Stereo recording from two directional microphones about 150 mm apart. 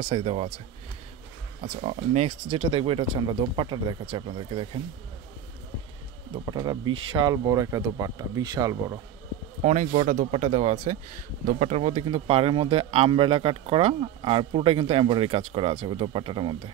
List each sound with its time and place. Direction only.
0.1 s speech: 40° right (ahead or behind)
1.8 s speech: 45° right (ahead or behind)
4.0 s speech: 40° right (ahead or behind)
6.3 s speech: 25° right (ahead or behind)
9.6 s a man's voice: 50° right (ahead or behind); by 16.7 s 35° right (ahead or behind)